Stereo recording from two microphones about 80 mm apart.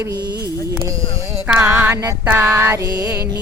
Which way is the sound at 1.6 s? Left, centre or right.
Right.